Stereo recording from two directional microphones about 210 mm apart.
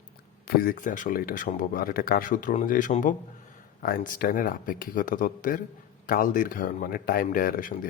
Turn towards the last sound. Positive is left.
turn(degrees=40)  # may be behind; listen again after turning